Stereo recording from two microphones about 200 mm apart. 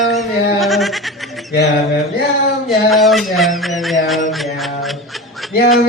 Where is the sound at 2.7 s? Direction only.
Centre (ahead or behind).